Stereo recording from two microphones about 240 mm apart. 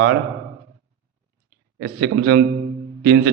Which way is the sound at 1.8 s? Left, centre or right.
Right.